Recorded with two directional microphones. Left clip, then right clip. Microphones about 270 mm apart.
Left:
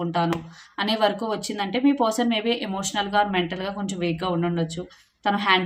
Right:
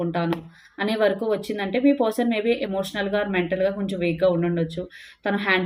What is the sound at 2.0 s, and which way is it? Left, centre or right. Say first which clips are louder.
Speech: even; left.